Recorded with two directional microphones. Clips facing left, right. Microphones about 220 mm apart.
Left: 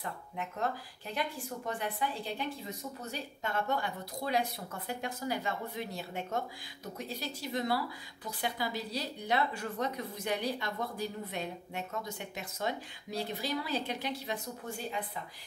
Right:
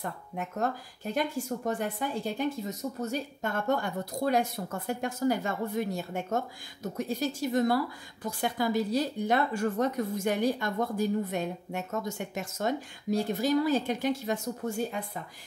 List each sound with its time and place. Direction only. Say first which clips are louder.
0.0 s speech: right 4 dB; 45° right (ahead or behind)